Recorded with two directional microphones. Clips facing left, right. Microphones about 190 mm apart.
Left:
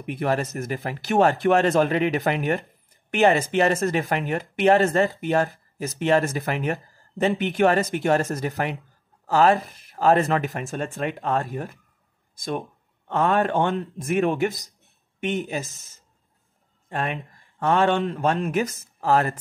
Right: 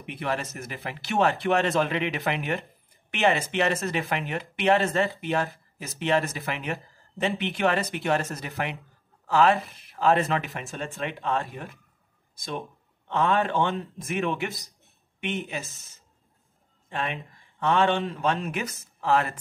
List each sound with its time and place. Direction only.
0.0 s speech: 45° left (ahead or behind)
13.1 s speech: 45° left (ahead or behind)
16.9 s speech: 45° left (ahead or behind)